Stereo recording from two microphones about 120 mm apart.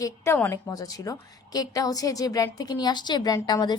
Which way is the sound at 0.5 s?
30° left (ahead or behind).